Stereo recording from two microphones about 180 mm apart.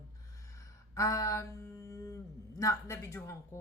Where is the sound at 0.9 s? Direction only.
20° left (ahead or behind).